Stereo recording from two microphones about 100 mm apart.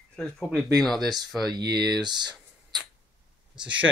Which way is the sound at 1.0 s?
40° right (ahead or behind).